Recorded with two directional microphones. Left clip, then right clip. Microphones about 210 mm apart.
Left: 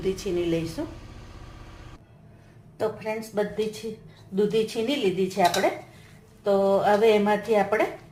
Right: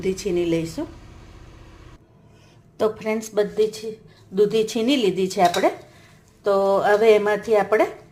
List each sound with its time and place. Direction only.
0.0 s speech: 35° right (ahead or behind)
2.7 s speech: 50° right (ahead or behind)